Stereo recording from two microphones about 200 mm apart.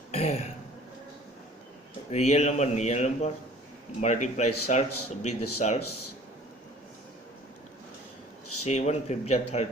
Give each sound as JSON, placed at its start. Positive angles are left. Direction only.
{"t": 0.1, "sound": "throat clearing", "side_deg": 30}
{"t": 2.0, "sound": "speech", "side_deg": 35}
{"t": 8.6, "sound": "speech", "side_deg": 35}